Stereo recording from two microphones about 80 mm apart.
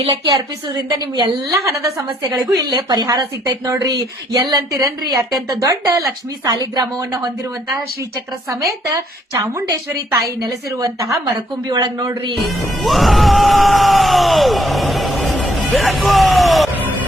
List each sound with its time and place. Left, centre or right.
0.1 s a woman's voice: right
2.7 s a man's voice: right
3.1 s a woman's voice: right
8.4 s a woman's voice: right
10.2 s a woman's voice: right
11.7 s a man's voice: right
12.8 s bellow: centre